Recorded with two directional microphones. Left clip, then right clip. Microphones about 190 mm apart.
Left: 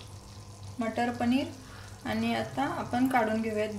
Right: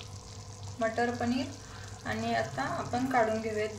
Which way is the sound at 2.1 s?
35° left (ahead or behind).